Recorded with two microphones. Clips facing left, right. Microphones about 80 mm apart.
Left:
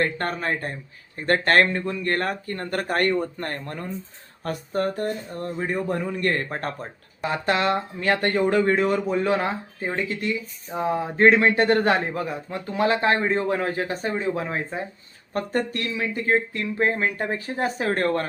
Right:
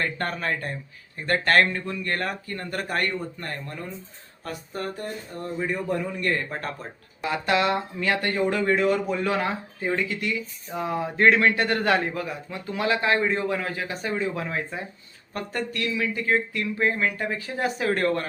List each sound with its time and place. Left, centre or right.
0.0 s speech: left